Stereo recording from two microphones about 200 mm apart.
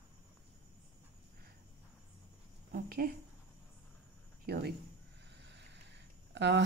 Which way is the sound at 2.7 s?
50° right (ahead or behind).